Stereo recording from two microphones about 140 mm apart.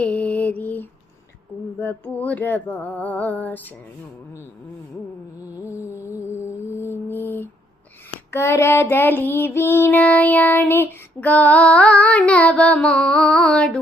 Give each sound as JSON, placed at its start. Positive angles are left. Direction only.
{"t": 0.0, "sound": "mantra", "side_deg": 10}
{"t": 1.8, "sound": "child singing", "side_deg": 10}
{"t": 5.5, "sound": "music", "side_deg": -15}
{"t": 5.8, "sound": "music", "side_deg": 20}
{"t": 8.3, "sound": "child singing", "side_deg": 20}